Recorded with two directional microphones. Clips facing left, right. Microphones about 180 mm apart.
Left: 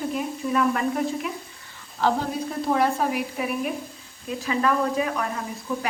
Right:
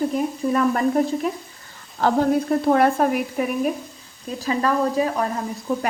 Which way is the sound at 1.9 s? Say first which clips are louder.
Right 6 dB; 50° right (ahead or behind).